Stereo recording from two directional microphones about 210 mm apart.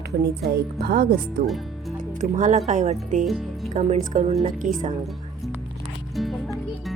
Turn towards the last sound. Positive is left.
turn(degrees=0)  # may be behind; listen again after turning